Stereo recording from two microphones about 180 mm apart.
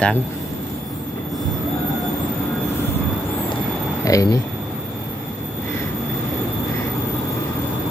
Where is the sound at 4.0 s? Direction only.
20° left (ahead or behind).